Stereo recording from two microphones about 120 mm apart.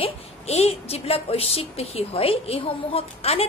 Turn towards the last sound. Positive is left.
turn(degrees=55)  # may be behind; listen again after turning